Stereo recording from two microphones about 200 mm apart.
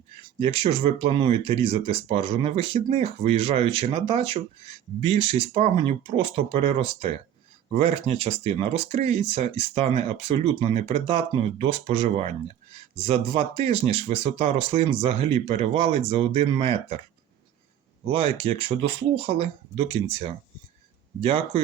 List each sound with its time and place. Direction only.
0.3 s speech: 30° right (ahead or behind)
18.0 s speech: 25° right (ahead or behind)